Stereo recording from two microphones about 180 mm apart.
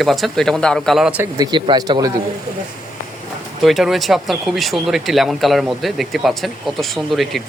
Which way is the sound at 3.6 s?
Centre (ahead or behind).